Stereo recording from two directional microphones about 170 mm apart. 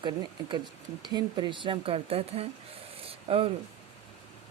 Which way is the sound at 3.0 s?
35° right (ahead or behind).